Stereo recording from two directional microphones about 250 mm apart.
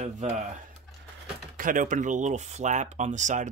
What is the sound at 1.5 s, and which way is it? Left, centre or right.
Speech, right.